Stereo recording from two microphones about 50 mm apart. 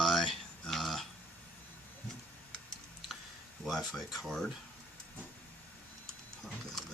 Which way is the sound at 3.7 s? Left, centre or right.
Centre.